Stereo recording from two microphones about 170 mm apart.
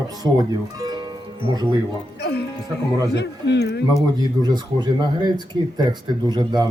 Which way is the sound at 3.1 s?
90° left.